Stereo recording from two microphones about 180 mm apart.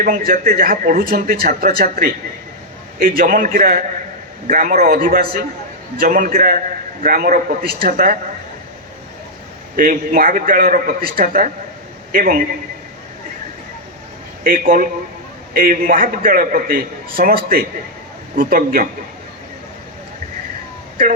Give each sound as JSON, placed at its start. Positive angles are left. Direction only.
{"t": 0.0, "sound": "a man's voice", "side_deg": -50}
{"t": 9.7, "sound": "a man's voice", "side_deg": -50}
{"t": 14.4, "sound": "a man's voice", "side_deg": -50}